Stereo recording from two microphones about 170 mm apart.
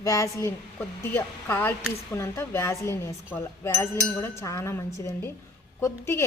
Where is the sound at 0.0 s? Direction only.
20° left (ahead or behind).